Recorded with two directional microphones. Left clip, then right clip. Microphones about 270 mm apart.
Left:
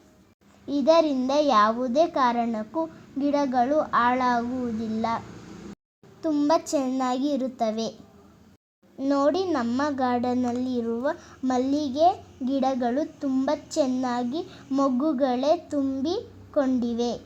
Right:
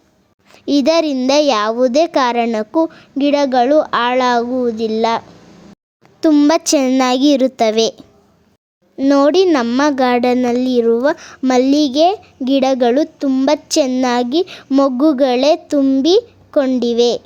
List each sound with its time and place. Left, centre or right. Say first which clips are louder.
0.6 s a child's voice: right 7 dB; right
9.0 s a child's voice: right 12 dB; right